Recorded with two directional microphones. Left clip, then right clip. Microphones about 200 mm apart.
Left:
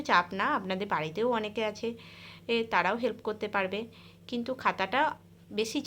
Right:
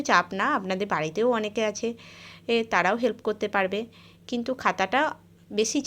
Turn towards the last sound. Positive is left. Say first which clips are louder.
# right 6 dB
turn(degrees=-25)  # may be behind; listen again after turning